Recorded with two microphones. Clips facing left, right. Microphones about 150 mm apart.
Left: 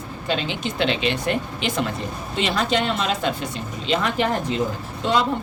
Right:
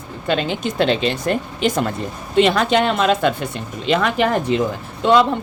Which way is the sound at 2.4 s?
55° right (ahead or behind).